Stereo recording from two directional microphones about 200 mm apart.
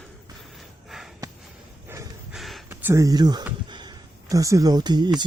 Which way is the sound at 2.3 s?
Centre (ahead or behind).